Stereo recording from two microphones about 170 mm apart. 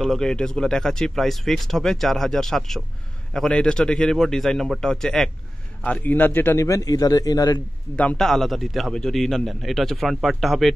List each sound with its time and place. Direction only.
0.0 s a man's voice: centre (ahead or behind); by 7.6 s 20° left (ahead or behind)
7.9 s speech: 10° left (ahead or behind)